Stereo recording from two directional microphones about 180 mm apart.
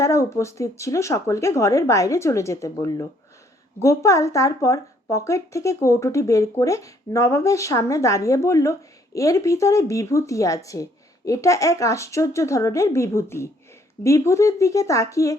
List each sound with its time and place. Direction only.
0.0 s speech: 15° left (ahead or behind)